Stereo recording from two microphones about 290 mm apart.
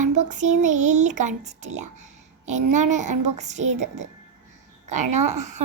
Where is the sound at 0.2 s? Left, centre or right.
Right.